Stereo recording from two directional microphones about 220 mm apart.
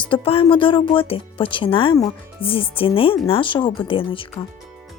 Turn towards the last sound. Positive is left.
turn(degrees=25)  # may be behind; listen again after turning